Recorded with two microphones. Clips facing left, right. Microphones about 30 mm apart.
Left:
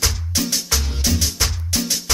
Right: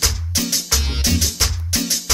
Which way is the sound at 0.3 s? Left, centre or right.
Centre.